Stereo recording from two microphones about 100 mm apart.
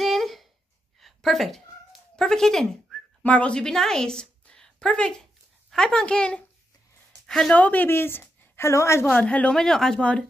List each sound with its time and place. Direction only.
0.0 s a sound: centre (ahead or behind)
1.0 s cat: centre (ahead or behind)
5.7 s a woman's voice: 5° left (ahead or behind); by 9.0 s 30° left (ahead or behind)
9.1 s speech: 10° left (ahead or behind)